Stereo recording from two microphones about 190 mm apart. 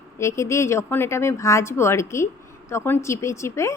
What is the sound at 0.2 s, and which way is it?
Speech, 15° left (ahead or behind).